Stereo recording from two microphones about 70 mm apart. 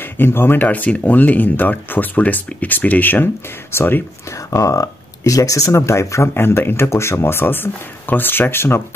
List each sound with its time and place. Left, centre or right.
0.0 s speech: left
4.3 s speech: left